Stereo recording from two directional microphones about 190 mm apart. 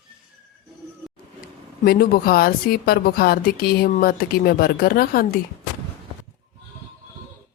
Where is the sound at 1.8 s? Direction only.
50° left (ahead or behind).